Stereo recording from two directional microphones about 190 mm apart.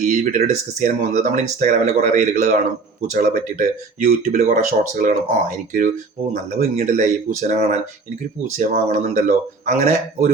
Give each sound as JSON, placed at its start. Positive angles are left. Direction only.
{"t": 0.0, "sound": "speech", "side_deg": -40}
{"t": 8.9, "sound": "speech", "side_deg": -40}